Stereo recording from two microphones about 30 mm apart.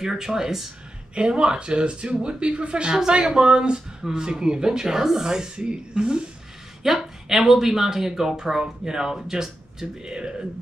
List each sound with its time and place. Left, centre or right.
0.0 s speech: centre
1.1 s speech: right
5.6 s speech: right
6.8 s speech: centre